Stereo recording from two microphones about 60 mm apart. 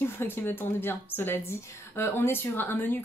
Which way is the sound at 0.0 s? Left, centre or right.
Left.